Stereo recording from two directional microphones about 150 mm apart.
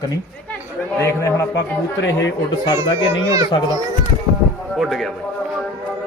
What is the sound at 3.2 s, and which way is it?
Speech, 20° right (ahead or behind).